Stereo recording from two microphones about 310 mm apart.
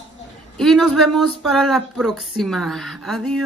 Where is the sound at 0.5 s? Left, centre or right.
Centre.